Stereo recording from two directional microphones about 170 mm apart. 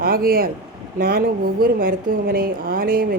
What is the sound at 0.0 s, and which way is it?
A woman's voice, 60° right (ahead or behind).